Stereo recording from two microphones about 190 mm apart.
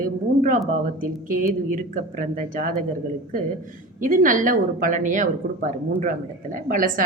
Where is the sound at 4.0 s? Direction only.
45° right (ahead or behind).